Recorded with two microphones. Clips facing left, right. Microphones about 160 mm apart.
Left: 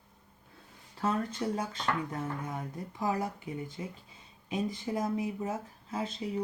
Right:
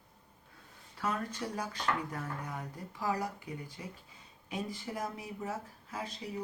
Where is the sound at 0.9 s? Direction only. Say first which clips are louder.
Left 4 dB; 25° left (ahead or behind).